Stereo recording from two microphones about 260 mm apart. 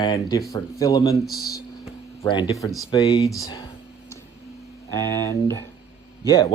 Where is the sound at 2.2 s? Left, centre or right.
Centre.